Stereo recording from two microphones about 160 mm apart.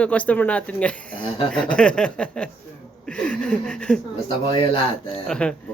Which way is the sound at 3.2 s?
5° left (ahead or behind).